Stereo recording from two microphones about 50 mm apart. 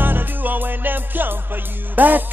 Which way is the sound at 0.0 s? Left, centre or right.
Right.